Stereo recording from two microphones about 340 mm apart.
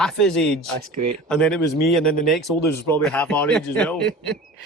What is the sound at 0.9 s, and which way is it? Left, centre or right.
Speech, right.